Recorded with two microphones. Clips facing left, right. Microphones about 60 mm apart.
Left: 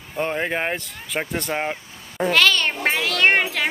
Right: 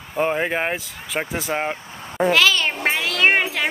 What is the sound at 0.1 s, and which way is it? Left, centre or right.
Vehicle, centre.